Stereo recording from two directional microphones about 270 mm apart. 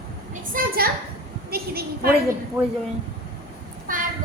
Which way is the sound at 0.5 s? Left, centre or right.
Right.